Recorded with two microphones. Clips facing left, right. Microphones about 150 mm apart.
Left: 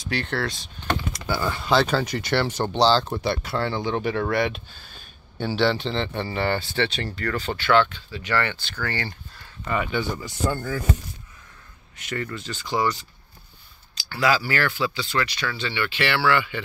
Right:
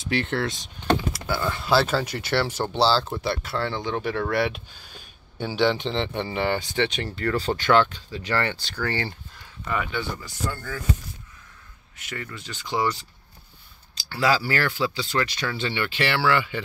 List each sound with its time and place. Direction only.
0.0 s speech: 20° right (ahead or behind)
1.1 s speech: centre (ahead or behind); by 9.1 s 30° right (ahead or behind)
9.8 s speech: 15° left (ahead or behind)
12.0 s speech: 5° right (ahead or behind); by 13.0 s 25° right (ahead or behind)
14.0 s speech: 30° right (ahead or behind)